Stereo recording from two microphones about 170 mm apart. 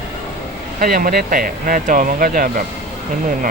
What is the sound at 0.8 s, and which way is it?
Speech, 60° right (ahead or behind).